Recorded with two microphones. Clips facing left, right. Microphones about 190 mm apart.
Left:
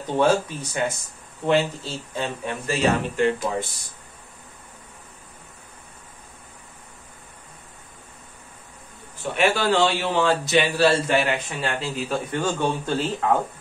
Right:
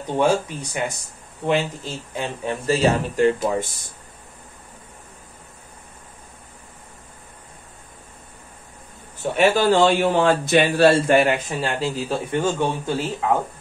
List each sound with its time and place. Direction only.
0.1 s a man's voice: 15° right (ahead or behind)
2.4 s speech: 35° right (ahead or behind)
9.2 s a man's voice: 40° right (ahead or behind)
12.4 s a man's voice: 15° right (ahead or behind)